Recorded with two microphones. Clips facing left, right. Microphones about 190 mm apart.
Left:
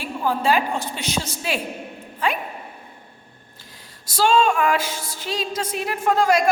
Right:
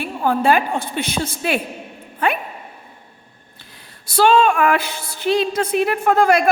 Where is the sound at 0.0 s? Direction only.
55° right (ahead or behind).